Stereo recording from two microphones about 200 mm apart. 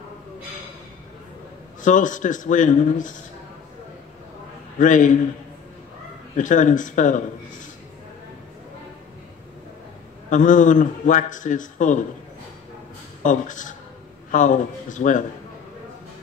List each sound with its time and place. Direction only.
1.9 s a man's voice: 40° left (ahead or behind)
4.7 s a man's voice: 40° left (ahead or behind)
6.3 s a man's voice: 40° left (ahead or behind)
10.3 s a man's voice: 40° left (ahead or behind)
13.2 s a man's voice: 40° left (ahead or behind)